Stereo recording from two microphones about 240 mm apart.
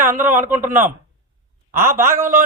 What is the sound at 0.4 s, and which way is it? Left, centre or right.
Speech, centre.